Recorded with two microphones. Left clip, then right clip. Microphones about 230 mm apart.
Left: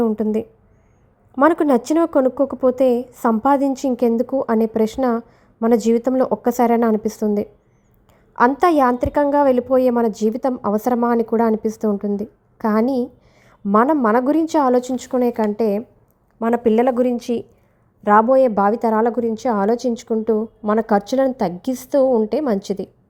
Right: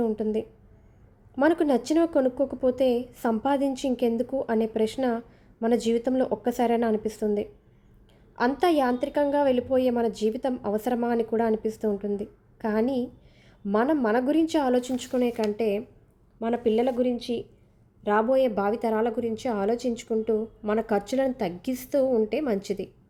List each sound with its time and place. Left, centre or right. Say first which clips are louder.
0.0 s a woman's voice: left 7 dB; left